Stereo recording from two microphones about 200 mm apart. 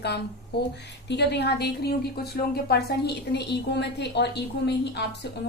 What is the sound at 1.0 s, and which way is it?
Speech, 60° left (ahead or behind).